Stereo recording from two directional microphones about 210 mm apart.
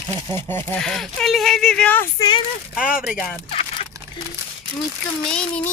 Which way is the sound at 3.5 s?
25° left (ahead or behind).